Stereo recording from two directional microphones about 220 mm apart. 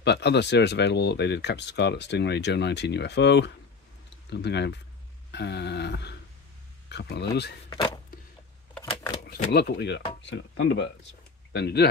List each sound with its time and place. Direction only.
0.0 s speech: 50° left (ahead or behind)
7.7 s vehicle: 20° left (ahead or behind)
8.8 s shuffling cards: 20° left (ahead or behind)
9.5 s speech: 45° left (ahead or behind)